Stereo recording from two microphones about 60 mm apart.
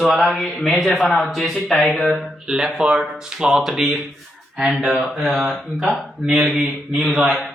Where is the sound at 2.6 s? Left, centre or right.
Centre.